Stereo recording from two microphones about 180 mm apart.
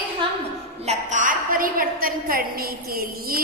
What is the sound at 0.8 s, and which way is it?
A woman's voice, 40° right (ahead or behind).